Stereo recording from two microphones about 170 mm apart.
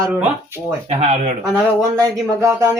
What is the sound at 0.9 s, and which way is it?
Speech, 40° right (ahead or behind).